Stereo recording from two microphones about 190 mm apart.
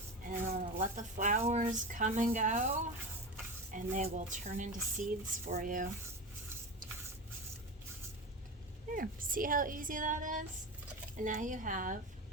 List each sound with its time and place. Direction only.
0.4 s speech: 35° right (ahead or behind)
9.0 s speech: 45° right (ahead or behind)